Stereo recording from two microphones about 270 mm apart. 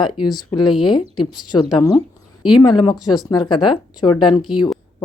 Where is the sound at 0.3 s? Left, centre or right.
Centre.